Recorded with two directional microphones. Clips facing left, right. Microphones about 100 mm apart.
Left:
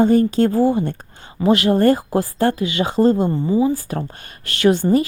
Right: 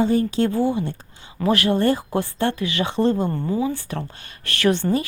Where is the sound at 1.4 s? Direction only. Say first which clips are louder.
Left 4 dB; 25° left (ahead or behind).